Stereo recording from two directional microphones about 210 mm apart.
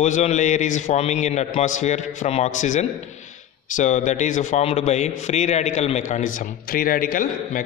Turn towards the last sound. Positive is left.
turn(degrees=40)  # may be behind; listen again after turning